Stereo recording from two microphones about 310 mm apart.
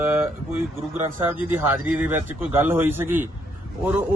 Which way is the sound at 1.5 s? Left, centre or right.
Centre.